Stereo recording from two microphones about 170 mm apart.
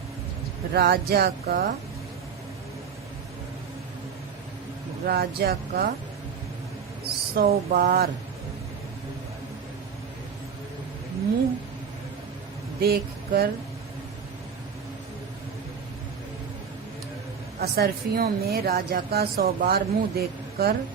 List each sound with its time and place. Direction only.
0.7 s a woman's voice: 65° right (ahead or behind)
5.0 s a woman's voice: 65° right (ahead or behind)
7.0 s speech: 65° right (ahead or behind)
12.8 s speech: 65° right (ahead or behind)
17.6 s a woman's voice: 65° right (ahead or behind)